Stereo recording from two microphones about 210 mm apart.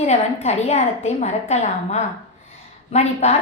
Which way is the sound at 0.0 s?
30° left (ahead or behind).